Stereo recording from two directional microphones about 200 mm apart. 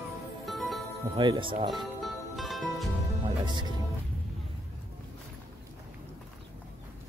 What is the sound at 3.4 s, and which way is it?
Speech, 25° right (ahead or behind).